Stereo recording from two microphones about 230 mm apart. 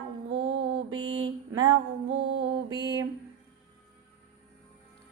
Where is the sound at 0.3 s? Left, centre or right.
Right.